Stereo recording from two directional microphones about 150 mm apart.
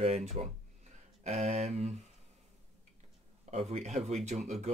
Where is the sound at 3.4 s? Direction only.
45° right (ahead or behind).